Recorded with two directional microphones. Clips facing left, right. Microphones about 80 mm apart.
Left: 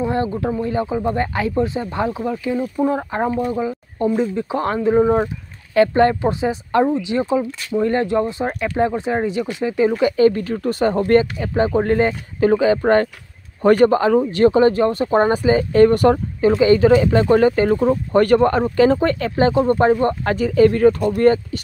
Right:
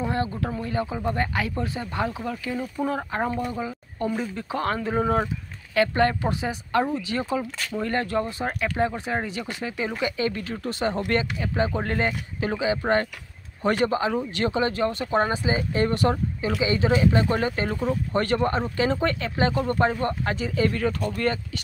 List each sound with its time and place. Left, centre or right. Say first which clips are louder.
0.0 s a sound: left 6 dB; left
0.6 s speech: left 7 dB; left
3.2 s speech: left 5 dB; centre
4.2 s speech: left 8 dB; left
4.7 s speech: left 10 dB; centre
5.8 s speech: left 7 dB; left
15.3 s speech: left 10 dB; left
20.3 s speech: left 10 dB; left